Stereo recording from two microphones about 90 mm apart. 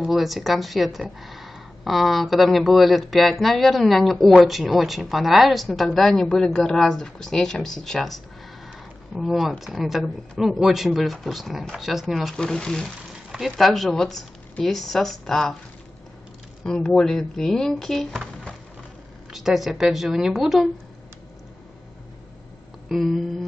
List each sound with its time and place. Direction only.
0.0 s speech: centre (ahead or behind)
16.6 s speech: 10° left (ahead or behind)
19.3 s speech: 5° right (ahead or behind)
22.8 s speech: centre (ahead or behind)